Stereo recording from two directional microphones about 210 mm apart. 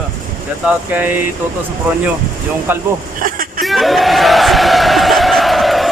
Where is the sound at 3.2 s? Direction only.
45° right (ahead or behind).